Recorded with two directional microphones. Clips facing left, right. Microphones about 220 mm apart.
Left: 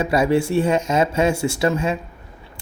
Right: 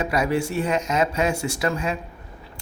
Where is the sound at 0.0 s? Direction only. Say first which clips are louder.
Left 5 dB; 25° left (ahead or behind).